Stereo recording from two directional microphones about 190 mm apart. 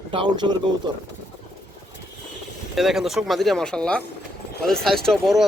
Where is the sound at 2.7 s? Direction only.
Centre (ahead or behind).